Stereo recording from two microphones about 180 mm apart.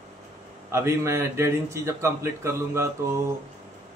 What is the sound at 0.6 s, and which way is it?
A man's voice, 15° right (ahead or behind).